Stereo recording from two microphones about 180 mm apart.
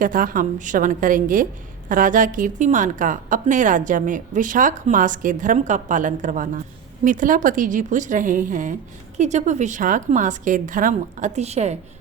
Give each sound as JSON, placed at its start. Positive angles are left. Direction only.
{"t": 0.0, "sound": "a woman's voice", "side_deg": -50}